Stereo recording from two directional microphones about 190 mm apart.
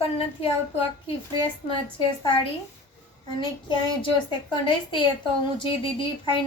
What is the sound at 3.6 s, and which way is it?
Speech, 25° left (ahead or behind).